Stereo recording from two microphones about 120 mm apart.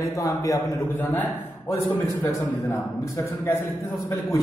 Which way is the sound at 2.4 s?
15° left (ahead or behind).